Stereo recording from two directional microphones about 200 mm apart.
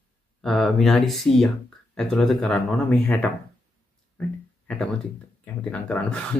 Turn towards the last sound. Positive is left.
turn(degrees=5)  # may be behind; listen again after turning